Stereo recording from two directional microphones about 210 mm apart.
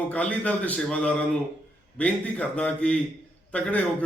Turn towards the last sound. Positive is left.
turn(degrees=5)  # may be behind; listen again after turning